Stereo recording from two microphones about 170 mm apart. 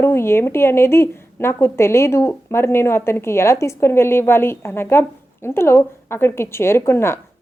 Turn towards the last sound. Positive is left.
turn(degrees=15)  # may be behind; listen again after turning